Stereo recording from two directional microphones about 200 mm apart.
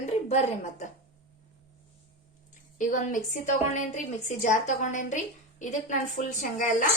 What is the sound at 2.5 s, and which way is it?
A woman's voice, 40° left (ahead or behind).